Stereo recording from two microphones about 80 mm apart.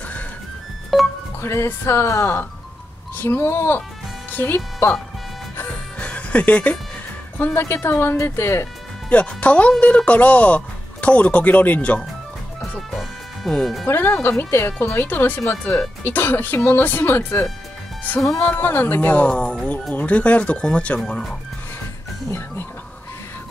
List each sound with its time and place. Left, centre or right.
0.9 s speech: centre
1.4 s speech: left
4.6 s speech: left
5.6 s music: centre
7.3 s speech: left
9.1 s speech: centre
12.9 s music: centre
13.8 s speech: left; by 21.0 s centre
21.0 s speech: centre